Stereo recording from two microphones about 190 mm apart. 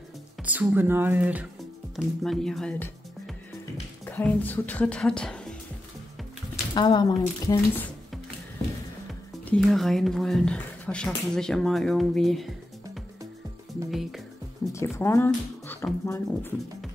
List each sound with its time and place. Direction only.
0.4 s speech: 10° right (ahead or behind)
6.5 s speech: 25° left (ahead or behind)
9.6 s speech: centre (ahead or behind)
13.8 s speech: centre (ahead or behind)
14.7 s speech: 15° left (ahead or behind)